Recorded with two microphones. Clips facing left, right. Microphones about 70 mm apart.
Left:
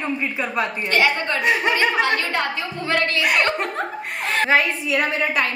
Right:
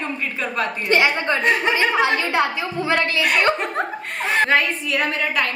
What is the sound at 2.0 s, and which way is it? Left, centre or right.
A woman's voice, centre.